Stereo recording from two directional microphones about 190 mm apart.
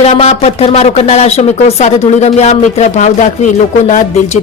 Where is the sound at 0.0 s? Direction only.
35° left (ahead or behind).